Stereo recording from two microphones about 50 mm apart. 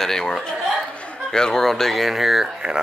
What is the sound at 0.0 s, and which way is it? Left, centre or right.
Speech, centre.